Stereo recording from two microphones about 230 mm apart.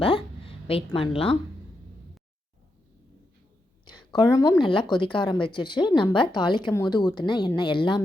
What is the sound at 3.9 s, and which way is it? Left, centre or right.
A woman's voice, centre.